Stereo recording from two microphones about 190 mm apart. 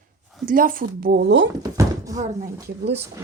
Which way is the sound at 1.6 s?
20° right (ahead or behind).